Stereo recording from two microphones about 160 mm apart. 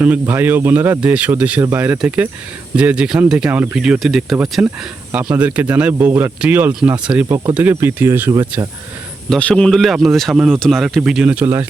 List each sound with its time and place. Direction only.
0.0 s speech: 10° right (ahead or behind)
9.3 s speech: 5° left (ahead or behind); by 11.6 s 10° right (ahead or behind)